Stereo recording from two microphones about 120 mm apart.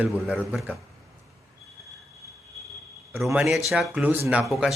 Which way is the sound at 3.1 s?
Centre (ahead or behind).